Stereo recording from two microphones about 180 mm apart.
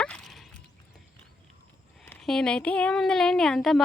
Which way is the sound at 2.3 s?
5° left (ahead or behind).